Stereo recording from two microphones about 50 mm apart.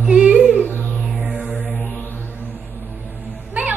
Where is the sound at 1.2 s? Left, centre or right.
Right.